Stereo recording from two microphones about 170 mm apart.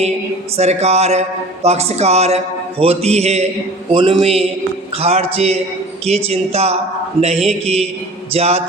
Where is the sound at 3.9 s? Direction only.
30° right (ahead or behind).